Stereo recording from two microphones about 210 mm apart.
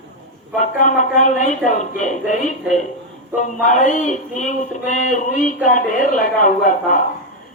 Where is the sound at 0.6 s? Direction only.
35° left (ahead or behind).